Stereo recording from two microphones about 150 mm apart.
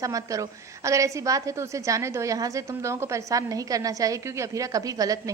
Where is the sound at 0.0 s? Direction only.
20° right (ahead or behind).